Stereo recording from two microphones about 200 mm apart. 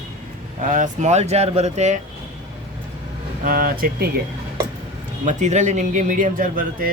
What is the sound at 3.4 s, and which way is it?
Speech, 45° right (ahead or behind).